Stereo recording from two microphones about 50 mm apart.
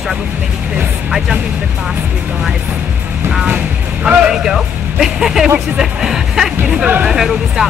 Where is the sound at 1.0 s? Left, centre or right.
Centre.